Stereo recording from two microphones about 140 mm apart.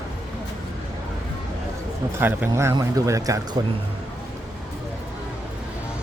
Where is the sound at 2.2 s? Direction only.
15° right (ahead or behind).